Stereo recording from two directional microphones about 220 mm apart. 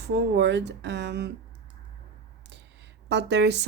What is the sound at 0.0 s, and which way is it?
A woman's voice, 50° right (ahead or behind).